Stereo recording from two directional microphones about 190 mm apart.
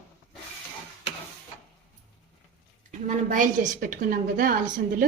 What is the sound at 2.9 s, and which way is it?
A woman's voice, 40° right (ahead or behind).